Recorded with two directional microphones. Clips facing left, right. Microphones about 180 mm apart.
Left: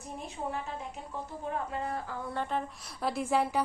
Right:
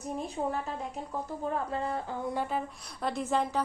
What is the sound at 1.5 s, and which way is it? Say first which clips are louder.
Speech: right 2 dB; 30° right (ahead or behind).